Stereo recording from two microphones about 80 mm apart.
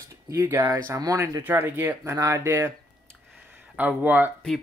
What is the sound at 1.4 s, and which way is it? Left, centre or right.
Speech, right.